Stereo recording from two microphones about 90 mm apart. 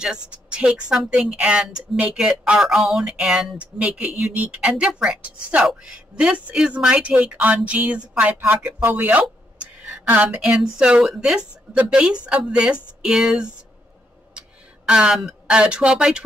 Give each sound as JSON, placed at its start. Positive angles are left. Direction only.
{"t": 0.0, "sound": "speech", "side_deg": -10}
{"t": 14.9, "sound": "speech", "side_deg": -10}